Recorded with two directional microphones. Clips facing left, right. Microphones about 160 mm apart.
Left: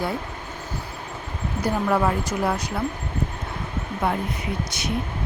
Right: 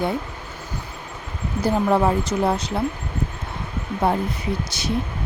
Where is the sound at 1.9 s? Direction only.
25° right (ahead or behind).